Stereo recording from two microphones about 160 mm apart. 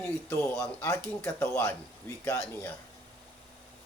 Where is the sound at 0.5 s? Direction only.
15° left (ahead or behind).